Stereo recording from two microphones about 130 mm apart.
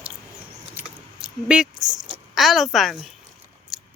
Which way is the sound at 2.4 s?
Centre (ahead or behind).